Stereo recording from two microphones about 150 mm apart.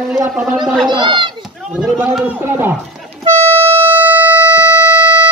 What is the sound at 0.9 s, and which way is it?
Speech, 30° right (ahead or behind).